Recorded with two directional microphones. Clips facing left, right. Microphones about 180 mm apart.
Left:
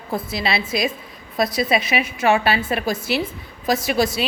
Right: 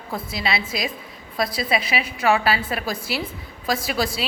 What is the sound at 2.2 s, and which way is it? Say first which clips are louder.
A woman's voice: left 1 dB; 25° left (ahead or behind).